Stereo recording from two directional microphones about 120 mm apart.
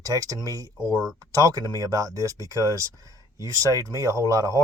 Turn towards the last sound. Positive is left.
turn(degrees=-25)  # may be behind; listen again after turning